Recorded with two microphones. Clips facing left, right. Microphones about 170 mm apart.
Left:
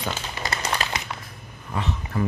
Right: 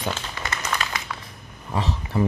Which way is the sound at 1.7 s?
35° right (ahead or behind).